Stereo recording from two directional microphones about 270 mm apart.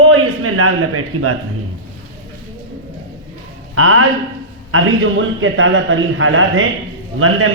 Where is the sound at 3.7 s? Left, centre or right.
Right.